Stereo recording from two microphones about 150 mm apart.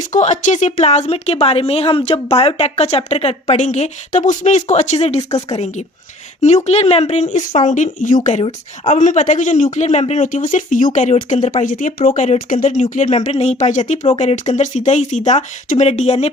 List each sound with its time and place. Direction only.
0.1 s speech: 55° left (ahead or behind)